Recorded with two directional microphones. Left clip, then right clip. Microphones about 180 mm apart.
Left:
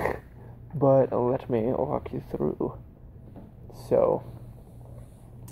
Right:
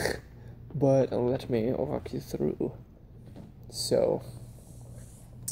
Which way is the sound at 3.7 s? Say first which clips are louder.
Left 3 dB; 30° right (ahead or behind).